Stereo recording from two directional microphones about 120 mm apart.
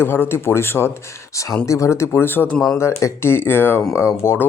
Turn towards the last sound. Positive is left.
turn(degrees=20)  # may be behind; listen again after turning